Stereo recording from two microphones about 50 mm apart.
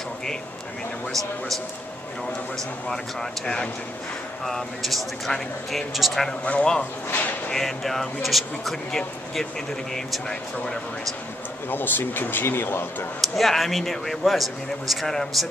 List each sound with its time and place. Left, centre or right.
2.9 s speech: centre
4.5 s speech: centre
6.4 s a man's voice: left
7.5 s speech: centre
8.9 s speech: centre
11.7 s speech: left
13.2 s speech: centre